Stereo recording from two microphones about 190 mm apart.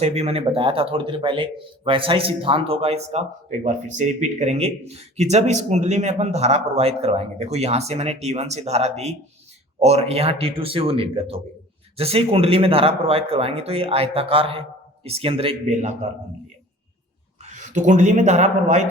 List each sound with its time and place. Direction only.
0.0 s a man's voice: 35° right (ahead or behind)
17.4 s speech: 40° right (ahead or behind)